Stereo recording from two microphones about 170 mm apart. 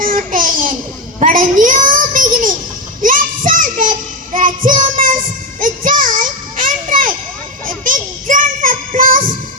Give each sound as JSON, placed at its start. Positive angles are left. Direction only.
{"t": 0.0, "sound": "a sound", "side_deg": -50}
{"t": 1.2, "sound": "child singing", "side_deg": -50}
{"t": 5.5, "sound": "children playing", "side_deg": -55}
{"t": 7.9, "sound": "music", "side_deg": -50}